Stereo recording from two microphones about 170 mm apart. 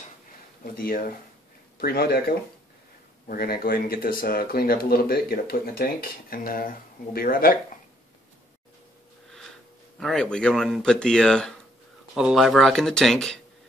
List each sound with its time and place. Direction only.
0.7 s speech: 60° left (ahead or behind)
9.9 s speech: 5° left (ahead or behind)